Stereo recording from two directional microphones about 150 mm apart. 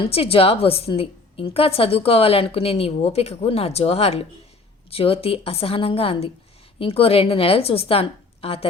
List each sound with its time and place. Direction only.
0.1 s speech: 40° left (ahead or behind)